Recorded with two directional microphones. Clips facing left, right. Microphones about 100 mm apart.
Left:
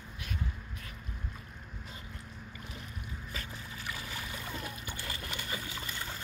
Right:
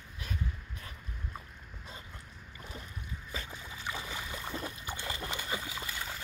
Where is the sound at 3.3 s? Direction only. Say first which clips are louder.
Right 2 dB; 20° right (ahead or behind).